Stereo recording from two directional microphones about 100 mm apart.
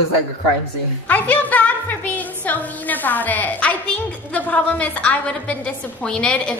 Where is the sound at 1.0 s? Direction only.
15° left (ahead or behind).